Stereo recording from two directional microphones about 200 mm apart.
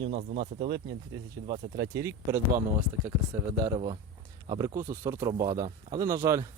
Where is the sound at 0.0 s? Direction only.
30° right (ahead or behind).